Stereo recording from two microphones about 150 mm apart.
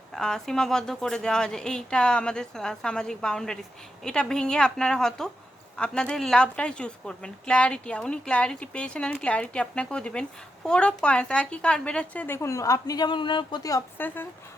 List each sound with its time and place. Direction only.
0.2 s a woman's voice: 5° left (ahead or behind)